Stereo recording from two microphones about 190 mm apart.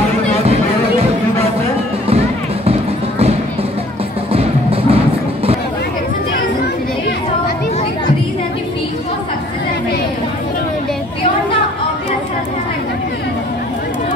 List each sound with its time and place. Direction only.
2.0 s music: 30° right (ahead or behind)
4.3 s music: 30° right (ahead or behind)